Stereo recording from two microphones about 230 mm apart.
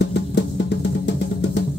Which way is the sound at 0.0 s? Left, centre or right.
Left.